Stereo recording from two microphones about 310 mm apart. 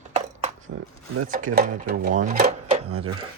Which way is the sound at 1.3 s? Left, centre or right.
Right.